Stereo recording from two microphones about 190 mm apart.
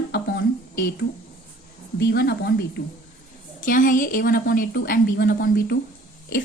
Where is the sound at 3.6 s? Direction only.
45° left (ahead or behind).